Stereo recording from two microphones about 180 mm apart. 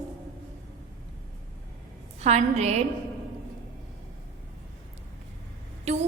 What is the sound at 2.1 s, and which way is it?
Speech, 35° right (ahead or behind).